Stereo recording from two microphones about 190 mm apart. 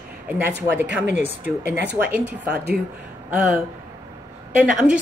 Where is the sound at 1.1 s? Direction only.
35° left (ahead or behind).